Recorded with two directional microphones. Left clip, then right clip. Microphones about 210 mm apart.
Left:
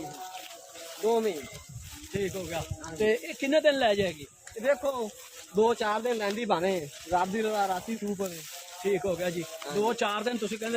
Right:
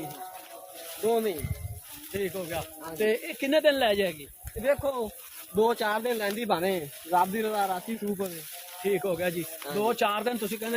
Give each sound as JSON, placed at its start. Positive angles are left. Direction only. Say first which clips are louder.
{"t": 1.0, "sound": "speech", "louder": "even", "side_deg": -30}
{"t": 4.6, "sound": "speech", "louder": "right 1 dB", "side_deg": -15}
{"t": 8.9, "sound": "speech", "louder": "right 1 dB", "side_deg": -40}